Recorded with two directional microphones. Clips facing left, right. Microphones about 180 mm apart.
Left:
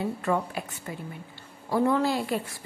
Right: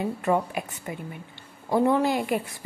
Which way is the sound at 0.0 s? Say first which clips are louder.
Right 3 dB; 15° right (ahead or behind).